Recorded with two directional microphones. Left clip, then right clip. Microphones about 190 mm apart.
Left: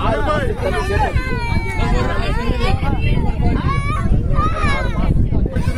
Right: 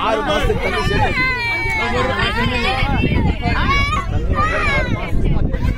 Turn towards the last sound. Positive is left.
turn(degrees=-55)  # may be behind; listen again after turning